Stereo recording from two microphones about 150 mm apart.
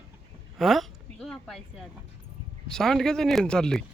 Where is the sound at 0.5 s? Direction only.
Centre (ahead or behind).